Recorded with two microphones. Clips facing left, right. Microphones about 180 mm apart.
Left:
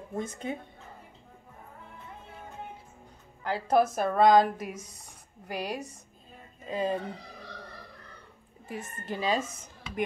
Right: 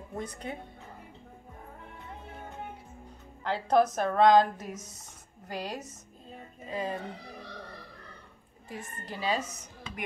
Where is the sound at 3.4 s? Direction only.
5° left (ahead or behind).